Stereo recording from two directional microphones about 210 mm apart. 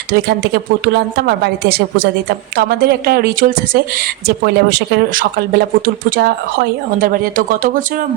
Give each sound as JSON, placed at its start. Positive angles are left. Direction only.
{"t": 0.1, "sound": "speech", "side_deg": -50}
{"t": 2.6, "sound": "speech", "side_deg": -45}